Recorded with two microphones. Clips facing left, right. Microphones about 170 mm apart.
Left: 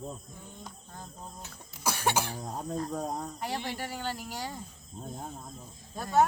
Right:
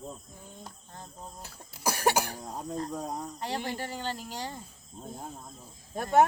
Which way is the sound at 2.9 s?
Centre (ahead or behind).